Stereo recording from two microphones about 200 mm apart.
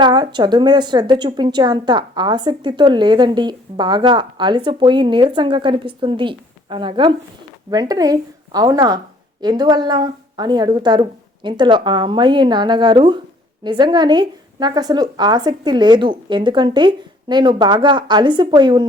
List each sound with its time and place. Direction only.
0.0 s a woman's voice: 20° right (ahead or behind)